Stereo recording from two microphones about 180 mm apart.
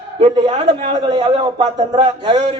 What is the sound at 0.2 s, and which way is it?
A man's voice, 35° right (ahead or behind).